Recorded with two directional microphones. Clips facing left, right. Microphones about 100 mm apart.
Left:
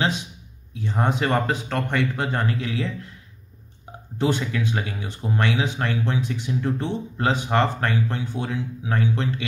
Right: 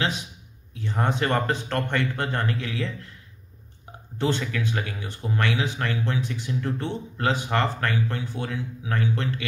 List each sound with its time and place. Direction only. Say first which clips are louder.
0.7 s speech: left 2 dB; 15° left (ahead or behind)
4.2 s speech: left 2 dB; 15° left (ahead or behind)